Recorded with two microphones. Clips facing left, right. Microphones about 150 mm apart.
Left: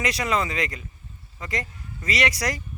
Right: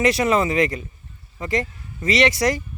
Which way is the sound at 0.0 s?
30° right (ahead or behind).